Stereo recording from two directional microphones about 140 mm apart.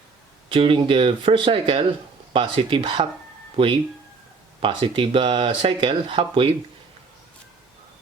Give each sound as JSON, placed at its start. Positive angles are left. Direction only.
{"t": 0.4, "sound": "speech", "side_deg": -40}